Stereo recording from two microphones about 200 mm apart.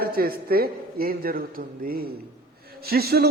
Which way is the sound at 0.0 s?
50° right (ahead or behind).